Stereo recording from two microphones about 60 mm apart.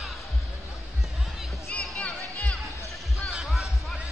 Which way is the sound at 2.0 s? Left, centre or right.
Left.